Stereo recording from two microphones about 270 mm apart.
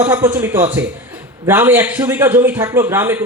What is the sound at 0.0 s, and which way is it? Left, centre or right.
Speech, centre.